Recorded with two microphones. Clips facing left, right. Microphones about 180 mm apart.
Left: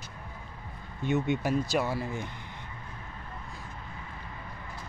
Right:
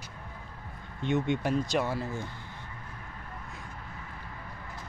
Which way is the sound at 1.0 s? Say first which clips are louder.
Even; 5° left (ahead or behind).